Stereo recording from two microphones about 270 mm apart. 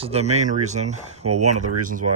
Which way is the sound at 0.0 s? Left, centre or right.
Right.